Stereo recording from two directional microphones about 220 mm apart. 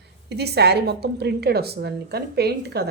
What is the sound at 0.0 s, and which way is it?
A woman's voice, 50° right (ahead or behind).